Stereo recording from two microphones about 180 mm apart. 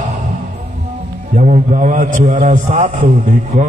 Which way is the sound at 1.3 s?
45° right (ahead or behind).